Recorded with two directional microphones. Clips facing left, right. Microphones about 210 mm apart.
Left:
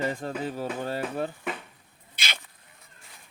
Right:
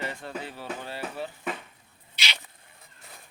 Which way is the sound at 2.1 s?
50° left (ahead or behind).